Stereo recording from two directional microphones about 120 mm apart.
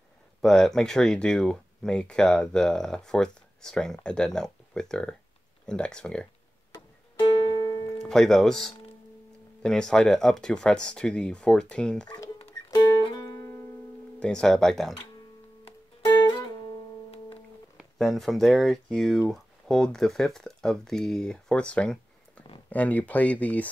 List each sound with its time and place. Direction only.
0.4 s speech: 5° left (ahead or behind)
7.2 s music: 40° left (ahead or behind)
8.0 s speech: 5° left (ahead or behind)
12.7 s music: 35° left (ahead or behind)
14.2 s speech: 5° left (ahead or behind)
16.2 s music: 35° left (ahead or behind)
17.9 s speech: centre (ahead or behind)